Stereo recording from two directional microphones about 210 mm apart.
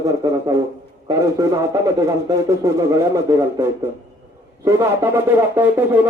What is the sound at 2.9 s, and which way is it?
A man's voice, 15° right (ahead or behind).